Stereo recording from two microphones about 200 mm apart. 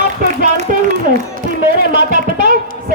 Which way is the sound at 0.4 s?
40° right (ahead or behind).